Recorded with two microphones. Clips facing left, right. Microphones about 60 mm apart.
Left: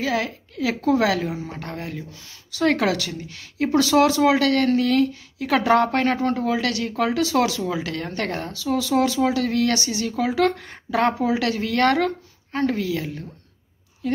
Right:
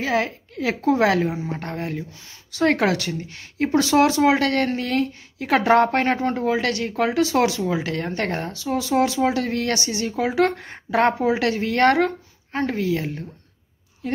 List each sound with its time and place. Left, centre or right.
0.0 s a woman's voice: right